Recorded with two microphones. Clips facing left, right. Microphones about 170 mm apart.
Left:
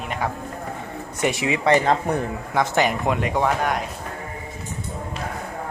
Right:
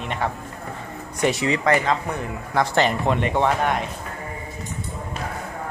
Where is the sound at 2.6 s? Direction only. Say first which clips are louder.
Even; 15° left (ahead or behind).